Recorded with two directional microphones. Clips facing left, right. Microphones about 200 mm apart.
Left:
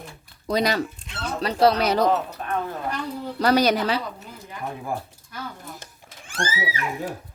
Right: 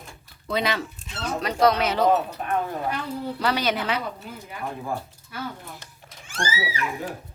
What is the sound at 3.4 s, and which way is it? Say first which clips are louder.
Speech: left 7 dB; 40° left (ahead or behind).